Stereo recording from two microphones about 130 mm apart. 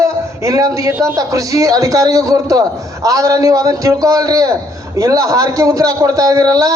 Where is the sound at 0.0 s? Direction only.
25° right (ahead or behind).